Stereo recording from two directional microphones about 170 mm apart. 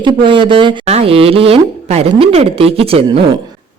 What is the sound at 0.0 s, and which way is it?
A woman's voice, 30° right (ahead or behind).